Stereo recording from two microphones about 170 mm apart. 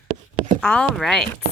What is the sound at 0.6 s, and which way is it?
Speech, 5° left (ahead or behind).